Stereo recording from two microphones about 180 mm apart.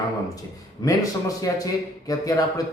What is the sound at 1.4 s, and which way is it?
Speech, 20° left (ahead or behind).